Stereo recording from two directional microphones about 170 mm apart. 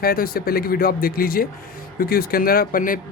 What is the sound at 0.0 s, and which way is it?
Speech, 60° left (ahead or behind).